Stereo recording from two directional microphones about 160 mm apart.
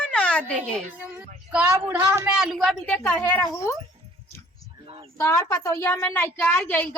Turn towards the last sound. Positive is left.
turn(degrees=10)  # may be behind; listen again after turning